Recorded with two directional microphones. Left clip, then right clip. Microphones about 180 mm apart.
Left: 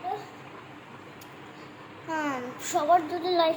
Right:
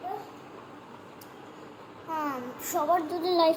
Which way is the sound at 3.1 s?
30° right (ahead or behind).